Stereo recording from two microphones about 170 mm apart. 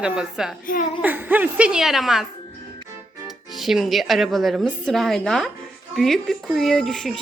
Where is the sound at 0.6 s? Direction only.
55° left (ahead or behind).